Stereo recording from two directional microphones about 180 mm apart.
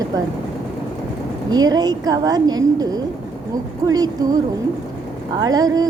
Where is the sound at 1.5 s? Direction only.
20° right (ahead or behind).